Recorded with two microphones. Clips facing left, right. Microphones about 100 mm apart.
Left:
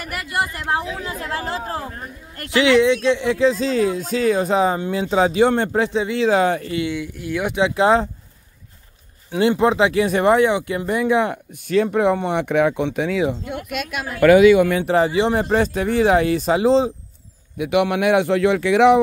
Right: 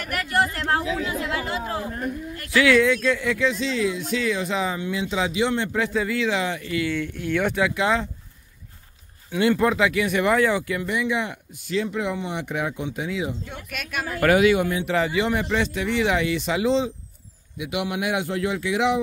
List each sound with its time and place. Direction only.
0.1 s speech: 10° left (ahead or behind)
1.0 s speech: 35° left (ahead or behind)
2.5 s speech: 20° left (ahead or behind); by 5.8 s 45° left (ahead or behind)
5.8 s speech: 25° left (ahead or behind); by 6.7 s 45° left (ahead or behind)
6.7 s speech: 20° left (ahead or behind)
7.7 s speech: 35° left (ahead or behind)
9.3 s speech: 25° left (ahead or behind)
10.9 s speech: 40° left (ahead or behind); by 13.7 s 65° left (ahead or behind)
14.9 s speech: 30° left (ahead or behind)
17.6 s speech: 60° left (ahead or behind)